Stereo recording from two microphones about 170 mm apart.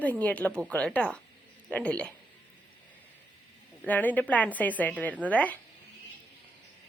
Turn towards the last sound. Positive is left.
turn(degrees=10)  # may be behind; listen again after turning